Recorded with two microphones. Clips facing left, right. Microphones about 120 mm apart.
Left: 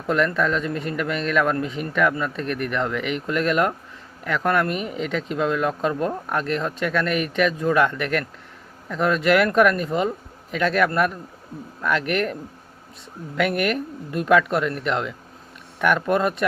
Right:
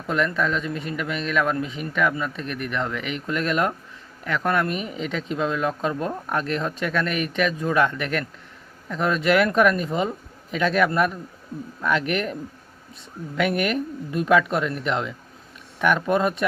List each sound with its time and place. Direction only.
0.1 s speech: 15° right (ahead or behind)
13.4 s speech: 20° right (ahead or behind)